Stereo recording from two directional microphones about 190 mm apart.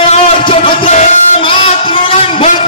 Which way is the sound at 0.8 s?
40° left (ahead or behind).